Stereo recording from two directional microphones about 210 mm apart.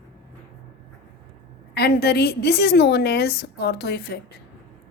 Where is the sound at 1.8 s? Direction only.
50° left (ahead or behind).